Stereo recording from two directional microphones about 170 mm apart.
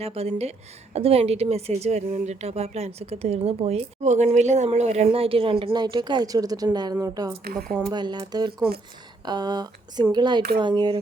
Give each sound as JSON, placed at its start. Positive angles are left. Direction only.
{"t": 0.0, "sound": "a woman's voice", "side_deg": -35}
{"t": 7.4, "sound": "speech", "side_deg": -60}
{"t": 7.9, "sound": "speech", "side_deg": -25}